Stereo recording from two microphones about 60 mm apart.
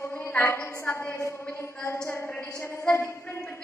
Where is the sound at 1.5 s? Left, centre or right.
Left.